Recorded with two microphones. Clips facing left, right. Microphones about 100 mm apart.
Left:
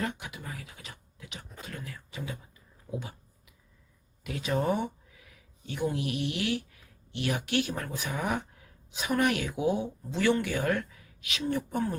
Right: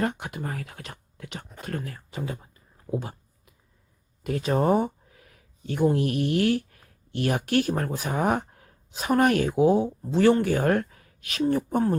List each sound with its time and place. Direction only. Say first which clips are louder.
0.0 s speech: right 7 dB; 50° right (ahead or behind)
3.0 s a sound: right 5 dB; 40° right (ahead or behind)
4.2 s speech: right 6 dB; 40° right (ahead or behind)